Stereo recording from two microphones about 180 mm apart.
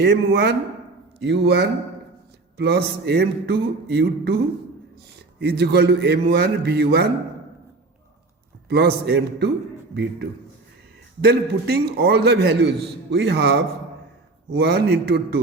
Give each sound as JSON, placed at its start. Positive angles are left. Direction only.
{"t": 0.0, "sound": "a man's voice", "side_deg": -60}
{"t": 5.4, "sound": "a man's voice", "side_deg": -65}
{"t": 8.7, "sound": "a man's voice", "side_deg": -60}
{"t": 11.3, "sound": "a man's voice", "side_deg": -60}